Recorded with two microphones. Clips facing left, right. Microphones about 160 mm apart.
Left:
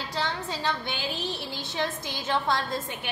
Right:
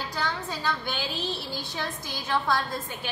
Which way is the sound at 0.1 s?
25° left (ahead or behind).